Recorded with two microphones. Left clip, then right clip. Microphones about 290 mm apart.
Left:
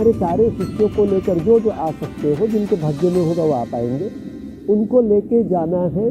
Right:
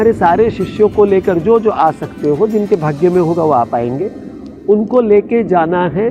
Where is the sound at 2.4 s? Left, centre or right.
Right.